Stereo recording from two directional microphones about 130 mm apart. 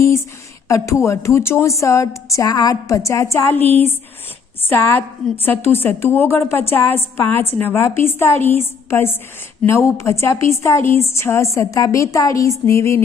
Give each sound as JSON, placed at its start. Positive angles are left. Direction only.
{"t": 0.0, "sound": "a sound", "side_deg": 20}
{"t": 0.7, "sound": "a woman's voice", "side_deg": 25}
{"t": 5.4, "sound": "a woman's voice", "side_deg": 15}